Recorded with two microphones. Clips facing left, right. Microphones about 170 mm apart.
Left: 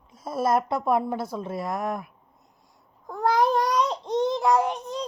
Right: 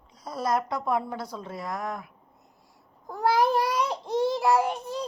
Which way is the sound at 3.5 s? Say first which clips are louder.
Left 2 dB; 10° right (ahead or behind).